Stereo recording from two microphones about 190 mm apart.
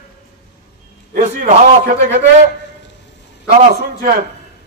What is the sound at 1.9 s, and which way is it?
Speech, 45° right (ahead or behind).